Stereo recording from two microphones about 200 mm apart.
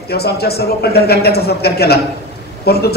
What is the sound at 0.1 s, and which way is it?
A man's voice, 55° left (ahead or behind).